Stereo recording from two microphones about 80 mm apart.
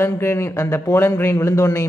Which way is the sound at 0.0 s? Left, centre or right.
Left.